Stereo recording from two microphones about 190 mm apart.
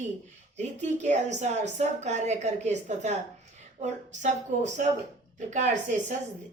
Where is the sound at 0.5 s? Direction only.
40° right (ahead or behind).